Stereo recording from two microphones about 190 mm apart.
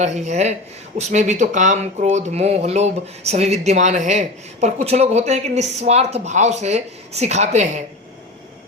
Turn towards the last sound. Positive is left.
turn(degrees=-40)  # may be behind; listen again after turning